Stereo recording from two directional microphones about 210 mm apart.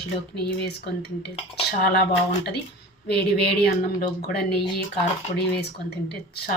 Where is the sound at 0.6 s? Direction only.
50° left (ahead or behind).